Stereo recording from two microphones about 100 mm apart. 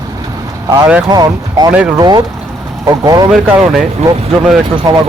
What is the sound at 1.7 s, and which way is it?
Speech, 10° right (ahead or behind).